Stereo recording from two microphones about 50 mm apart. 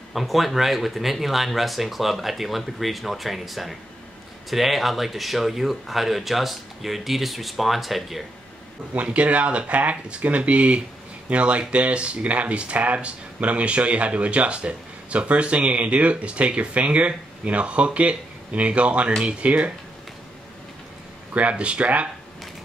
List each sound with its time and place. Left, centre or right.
0.1 s speech: centre
8.9 s speech: right
21.3 s speech: right